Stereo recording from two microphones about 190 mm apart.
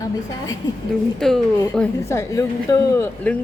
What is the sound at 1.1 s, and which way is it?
Speech, 5° left (ahead or behind).